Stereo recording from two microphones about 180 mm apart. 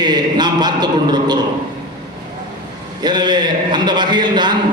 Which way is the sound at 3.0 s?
25° right (ahead or behind).